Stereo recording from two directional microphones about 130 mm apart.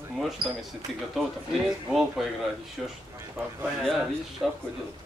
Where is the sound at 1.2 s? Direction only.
Centre (ahead or behind).